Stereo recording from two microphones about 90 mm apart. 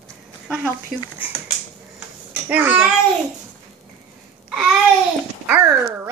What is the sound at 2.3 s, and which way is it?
Speech, 20° right (ahead or behind).